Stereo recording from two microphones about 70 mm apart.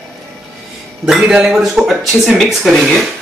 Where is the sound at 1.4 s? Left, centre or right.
Centre.